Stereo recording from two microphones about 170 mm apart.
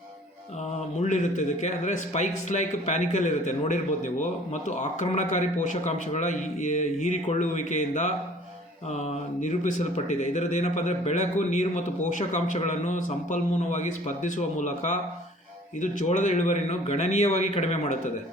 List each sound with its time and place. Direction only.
0.9 s speech: 45° left (ahead or behind)